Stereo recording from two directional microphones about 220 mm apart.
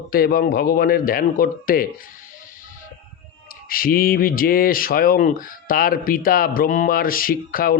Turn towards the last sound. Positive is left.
turn(degrees=40)  # may be behind; listen again after turning